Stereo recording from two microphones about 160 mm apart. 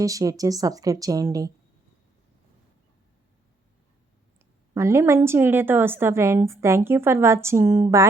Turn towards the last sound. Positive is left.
turn(degrees=-15)  # may be behind; listen again after turning